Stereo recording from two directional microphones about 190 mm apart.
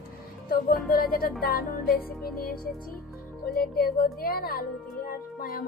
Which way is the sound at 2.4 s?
50° left (ahead or behind).